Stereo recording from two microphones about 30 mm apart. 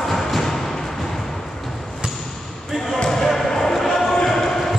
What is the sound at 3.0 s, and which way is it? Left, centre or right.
Basketball bounce, centre.